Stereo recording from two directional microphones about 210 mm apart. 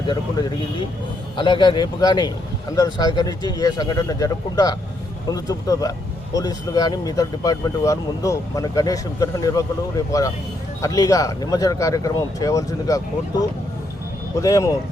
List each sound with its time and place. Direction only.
1.4 s speech: 20° left (ahead or behind)